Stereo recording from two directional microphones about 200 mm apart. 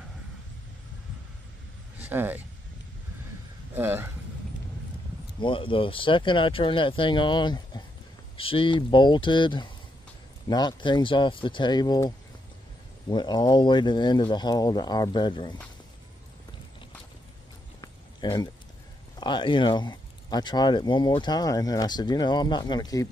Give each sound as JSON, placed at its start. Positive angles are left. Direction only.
{"t": 2.0, "sound": "speech", "side_deg": -10}
{"t": 3.7, "sound": "speech", "side_deg": -10}
{"t": 5.4, "sound": "speech", "side_deg": 25}
{"t": 13.1, "sound": "speech", "side_deg": 20}
{"t": 17.7, "sound": "a sound", "side_deg": 20}
{"t": 19.1, "sound": "speech", "side_deg": 20}